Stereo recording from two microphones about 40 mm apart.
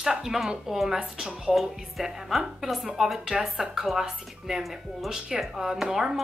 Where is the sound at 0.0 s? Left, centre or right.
Centre.